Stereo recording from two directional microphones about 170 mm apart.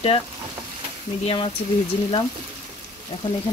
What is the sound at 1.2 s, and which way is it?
Frying, 30° left (ahead or behind).